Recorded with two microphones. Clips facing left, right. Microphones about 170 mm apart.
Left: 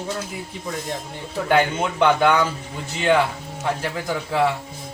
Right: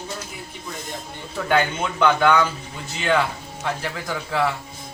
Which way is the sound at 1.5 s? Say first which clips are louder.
Left 2 dB; 30° left (ahead or behind).